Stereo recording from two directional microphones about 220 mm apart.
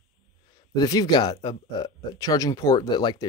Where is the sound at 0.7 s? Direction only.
15° left (ahead or behind).